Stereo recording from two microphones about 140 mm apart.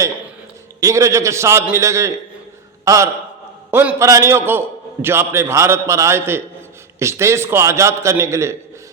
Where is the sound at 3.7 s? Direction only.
10° right (ahead or behind).